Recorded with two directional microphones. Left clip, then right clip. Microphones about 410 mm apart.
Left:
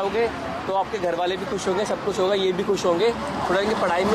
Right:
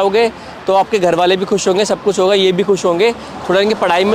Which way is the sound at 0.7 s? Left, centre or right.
Right.